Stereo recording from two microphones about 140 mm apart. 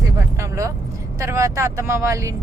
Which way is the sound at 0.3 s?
20° right (ahead or behind).